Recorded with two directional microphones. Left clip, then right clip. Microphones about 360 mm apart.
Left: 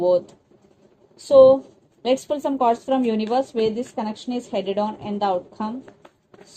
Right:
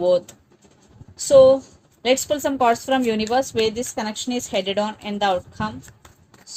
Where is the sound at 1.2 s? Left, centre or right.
Right.